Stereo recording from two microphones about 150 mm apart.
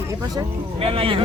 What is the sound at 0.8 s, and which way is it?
Speech, 40° right (ahead or behind).